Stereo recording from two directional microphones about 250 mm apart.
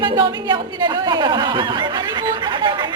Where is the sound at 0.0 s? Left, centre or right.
Centre.